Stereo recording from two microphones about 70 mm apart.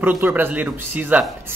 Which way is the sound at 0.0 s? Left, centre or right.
Right.